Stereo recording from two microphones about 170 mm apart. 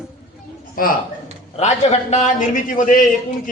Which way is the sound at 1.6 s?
40° left (ahead or behind).